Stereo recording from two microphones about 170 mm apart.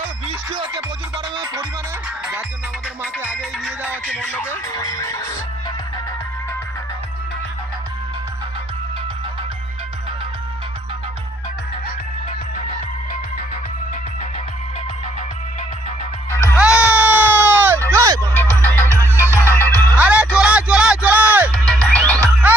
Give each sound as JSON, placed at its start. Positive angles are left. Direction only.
{"t": 0.3, "sound": "music", "side_deg": -25}
{"t": 3.0, "sound": "music", "side_deg": -10}
{"t": 16.6, "sound": "music", "side_deg": -5}
{"t": 18.3, "sound": "music", "side_deg": 10}
{"t": 20.0, "sound": "music", "side_deg": -5}
{"t": 21.7, "sound": "music", "side_deg": 5}
{"t": 22.2, "sound": "music", "side_deg": -10}